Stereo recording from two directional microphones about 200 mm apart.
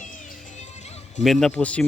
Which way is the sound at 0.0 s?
35° left (ahead or behind).